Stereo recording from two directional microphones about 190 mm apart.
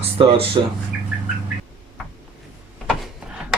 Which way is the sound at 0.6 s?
25° right (ahead or behind).